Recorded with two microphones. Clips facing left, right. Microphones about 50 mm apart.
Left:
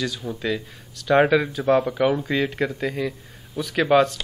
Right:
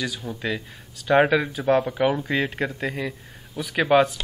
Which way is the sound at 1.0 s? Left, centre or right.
Centre.